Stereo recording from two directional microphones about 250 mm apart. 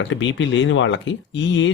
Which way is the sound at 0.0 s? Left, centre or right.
Left.